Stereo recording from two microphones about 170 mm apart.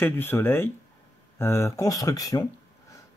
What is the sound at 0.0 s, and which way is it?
Speech, 10° left (ahead or behind).